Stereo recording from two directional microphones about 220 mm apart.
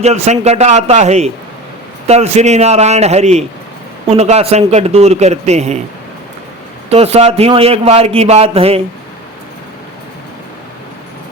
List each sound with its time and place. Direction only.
0.0 s a man's voice: 30° right (ahead or behind)
6.9 s a man's voice: 30° right (ahead or behind)